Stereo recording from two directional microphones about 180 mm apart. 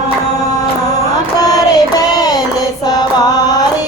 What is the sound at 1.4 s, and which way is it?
Child singing, 20° left (ahead or behind).